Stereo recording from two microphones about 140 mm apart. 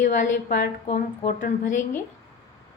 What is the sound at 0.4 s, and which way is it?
A woman's voice, 75° left (ahead or behind).